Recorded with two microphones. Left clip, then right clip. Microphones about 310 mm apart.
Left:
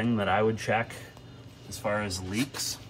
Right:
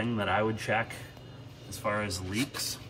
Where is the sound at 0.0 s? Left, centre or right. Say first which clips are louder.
Left 3 dB; centre.